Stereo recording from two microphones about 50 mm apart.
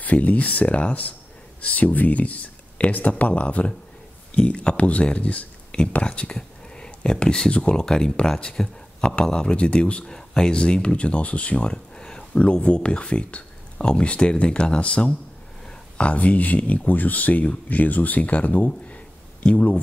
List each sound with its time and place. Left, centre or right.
0.0 s speech: left
11.5 s a sound: centre
12.6 s speech: left